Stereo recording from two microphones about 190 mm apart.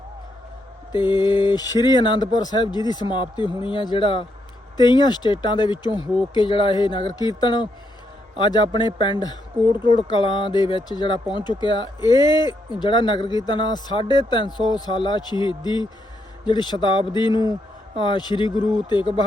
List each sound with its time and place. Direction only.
0.9 s speech: 25° left (ahead or behind)